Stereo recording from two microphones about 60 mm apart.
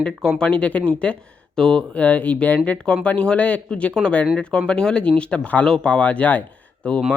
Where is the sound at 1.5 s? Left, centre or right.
Centre.